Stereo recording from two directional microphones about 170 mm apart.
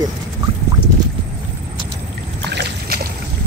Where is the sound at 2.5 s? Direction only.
70° right (ahead or behind).